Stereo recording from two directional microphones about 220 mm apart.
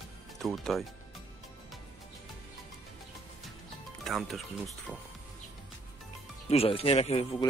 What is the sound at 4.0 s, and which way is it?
Speech, centre (ahead or behind).